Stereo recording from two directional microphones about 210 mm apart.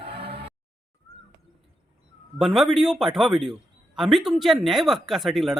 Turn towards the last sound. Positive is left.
turn(degrees=0)  # may be behind; listen again after turning